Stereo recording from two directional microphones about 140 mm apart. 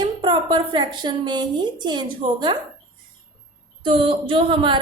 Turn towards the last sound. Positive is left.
turn(degrees=-35)  # may be behind; listen again after turning